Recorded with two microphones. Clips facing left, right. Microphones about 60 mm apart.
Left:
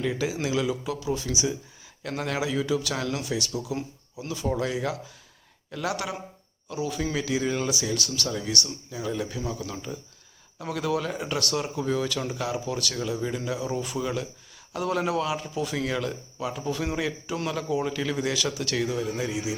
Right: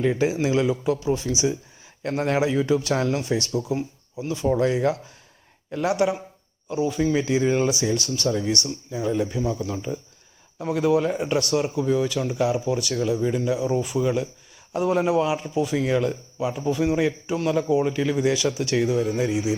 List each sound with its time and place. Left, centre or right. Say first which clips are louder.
0.0 s a man's voice: right 6 dB; right